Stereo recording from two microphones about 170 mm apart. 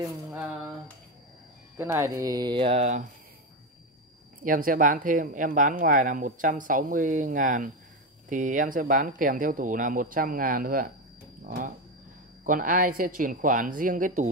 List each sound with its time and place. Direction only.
0.0 s a sound: 10° right (ahead or behind)
1.8 s speech: 15° right (ahead or behind); by 3.1 s 45° right (ahead or behind)
4.4 s speech: 55° right (ahead or behind)